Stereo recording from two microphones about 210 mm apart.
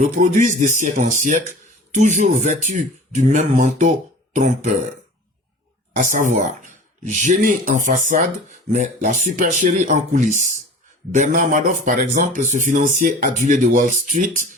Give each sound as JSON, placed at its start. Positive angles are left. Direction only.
{"t": 0.0, "sound": "speech", "side_deg": -35}
{"t": 5.9, "sound": "speech", "side_deg": -40}